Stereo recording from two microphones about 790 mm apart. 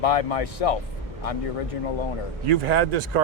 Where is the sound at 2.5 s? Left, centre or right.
Right.